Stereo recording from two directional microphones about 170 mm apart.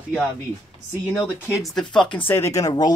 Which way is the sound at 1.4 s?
5° right (ahead or behind).